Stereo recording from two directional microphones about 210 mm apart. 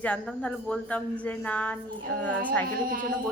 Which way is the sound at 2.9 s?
40° right (ahead or behind).